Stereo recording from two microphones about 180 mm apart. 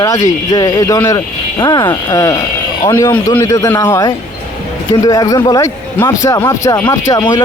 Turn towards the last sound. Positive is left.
turn(degrees=20)  # may be behind; listen again after turning